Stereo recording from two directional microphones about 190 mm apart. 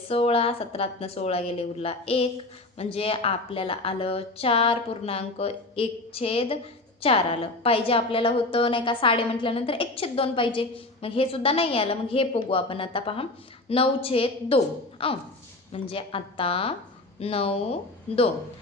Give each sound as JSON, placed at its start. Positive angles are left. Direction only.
{"t": 0.1, "sound": "a woman's voice", "side_deg": 30}